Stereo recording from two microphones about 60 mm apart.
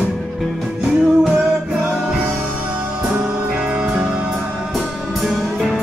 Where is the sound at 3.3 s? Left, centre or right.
Centre.